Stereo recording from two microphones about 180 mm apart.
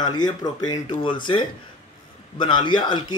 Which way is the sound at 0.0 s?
20° left (ahead or behind).